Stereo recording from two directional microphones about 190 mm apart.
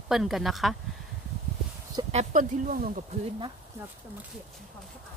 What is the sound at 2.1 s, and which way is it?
Speech, 40° right (ahead or behind).